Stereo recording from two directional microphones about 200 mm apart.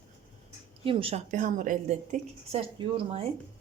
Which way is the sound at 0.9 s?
25° right (ahead or behind).